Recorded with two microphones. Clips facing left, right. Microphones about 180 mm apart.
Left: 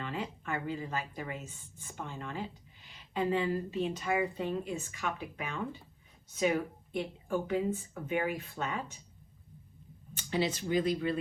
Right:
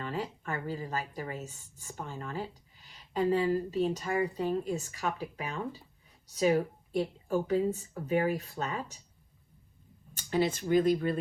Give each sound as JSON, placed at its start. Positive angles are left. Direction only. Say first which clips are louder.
{"t": 0.0, "sound": "speech", "louder": "right 2 dB", "side_deg": -40}
{"t": 10.2, "sound": "speech", "louder": "right 3 dB", "side_deg": -45}